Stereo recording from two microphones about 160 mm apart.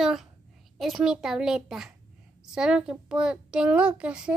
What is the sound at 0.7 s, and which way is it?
A child's voice, centre (ahead or behind).